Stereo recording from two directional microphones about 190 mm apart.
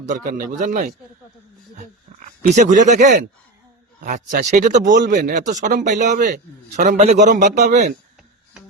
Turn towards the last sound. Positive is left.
turn(degrees=-40)  # may be behind; listen again after turning